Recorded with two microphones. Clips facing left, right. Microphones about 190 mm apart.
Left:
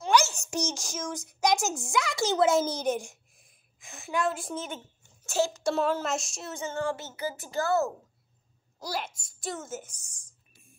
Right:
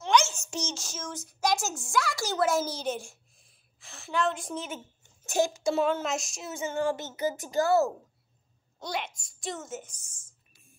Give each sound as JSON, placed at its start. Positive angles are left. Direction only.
{"t": 0.0, "sound": "a woman's voice", "side_deg": 10}
{"t": 5.2, "sound": "a child's voice", "side_deg": -15}
{"t": 5.6, "sound": "a woman's voice", "side_deg": 0}
{"t": 6.6, "sound": "a woman's voice", "side_deg": -15}
{"t": 8.7, "sound": "a woman's voice", "side_deg": 0}